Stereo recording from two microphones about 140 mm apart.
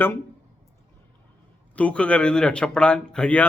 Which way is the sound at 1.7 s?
10° left (ahead or behind).